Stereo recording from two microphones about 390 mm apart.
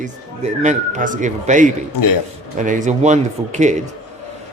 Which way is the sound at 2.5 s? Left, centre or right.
Centre.